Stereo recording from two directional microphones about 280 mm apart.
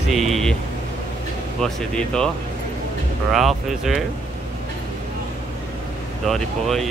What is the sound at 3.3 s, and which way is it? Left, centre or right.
Speech, centre.